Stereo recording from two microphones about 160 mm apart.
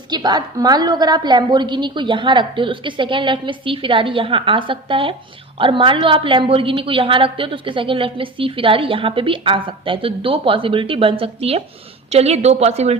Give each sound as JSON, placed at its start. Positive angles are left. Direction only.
{"t": 0.1, "sound": "a woman's voice", "side_deg": -25}